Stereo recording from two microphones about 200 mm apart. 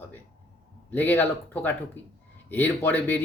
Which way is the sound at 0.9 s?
10° left (ahead or behind).